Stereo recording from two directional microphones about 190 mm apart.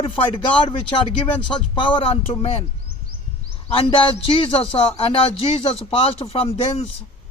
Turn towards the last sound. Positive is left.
turn(degrees=30)  # may be behind; listen again after turning